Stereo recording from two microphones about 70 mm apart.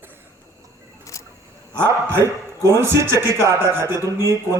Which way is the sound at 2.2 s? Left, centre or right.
Right.